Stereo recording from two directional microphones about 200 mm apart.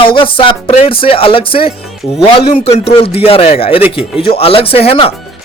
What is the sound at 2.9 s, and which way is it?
Speech, 30° left (ahead or behind).